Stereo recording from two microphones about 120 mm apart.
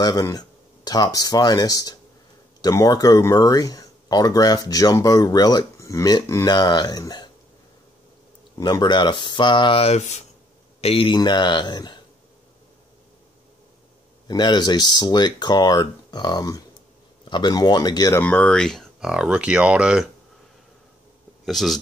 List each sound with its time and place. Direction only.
0.0 s speech: 30° left (ahead or behind)
8.5 s speech: 35° left (ahead or behind); by 10.2 s 70° left (ahead or behind)
10.8 s speech: 50° left (ahead or behind)
11.1 s speech: 40° left (ahead or behind)
14.2 s speech: 40° left (ahead or behind)
18.1 s speech: 15° left (ahead or behind); by 20.1 s 10° right (ahead or behind)
21.5 s speech: centre (ahead or behind)